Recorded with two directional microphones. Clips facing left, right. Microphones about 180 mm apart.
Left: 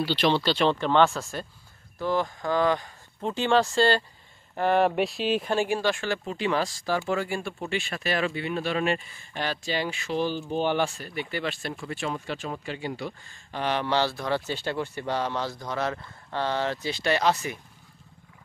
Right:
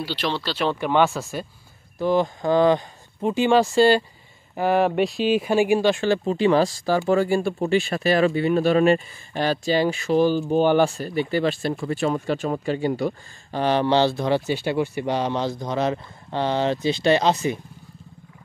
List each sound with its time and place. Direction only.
0.0 s speech: 5° right (ahead or behind)
2.0 s speech: 20° right (ahead or behind)
3.2 s speech: 10° right (ahead or behind)
14.4 s speech: 10° right (ahead or behind)